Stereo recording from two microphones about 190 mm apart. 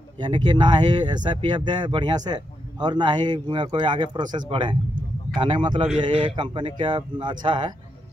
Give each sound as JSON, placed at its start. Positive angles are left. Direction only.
{"t": 0.2, "sound": "speech", "side_deg": -25}